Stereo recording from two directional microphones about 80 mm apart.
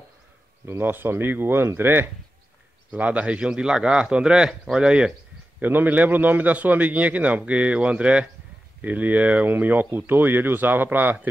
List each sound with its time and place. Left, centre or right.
0.7 s a man's voice: right; by 5.1 s centre
5.6 s a man's voice: right